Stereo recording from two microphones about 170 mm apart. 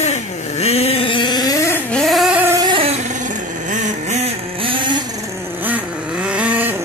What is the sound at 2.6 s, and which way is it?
Vehicle, 30° right (ahead or behind).